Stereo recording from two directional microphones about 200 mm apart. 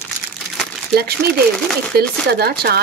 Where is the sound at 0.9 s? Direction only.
50° right (ahead or behind).